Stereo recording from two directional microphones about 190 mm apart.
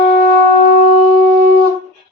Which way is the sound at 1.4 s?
50° right (ahead or behind).